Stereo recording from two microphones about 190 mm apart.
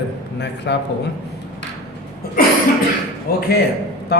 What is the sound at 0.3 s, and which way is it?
Speech, 65° left (ahead or behind).